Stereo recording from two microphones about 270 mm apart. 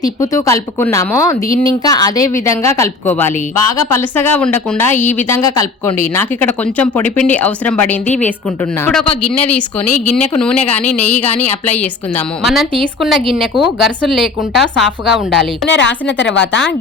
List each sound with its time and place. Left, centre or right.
0.0 s a woman's voice: centre
10.2 s speech: centre
15.6 s a woman's voice: left